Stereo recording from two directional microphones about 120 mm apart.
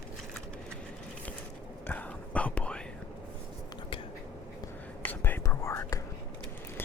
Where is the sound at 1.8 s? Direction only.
15° left (ahead or behind).